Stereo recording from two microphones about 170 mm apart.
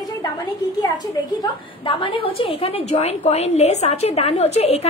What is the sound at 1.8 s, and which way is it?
A woman's voice, 30° left (ahead or behind).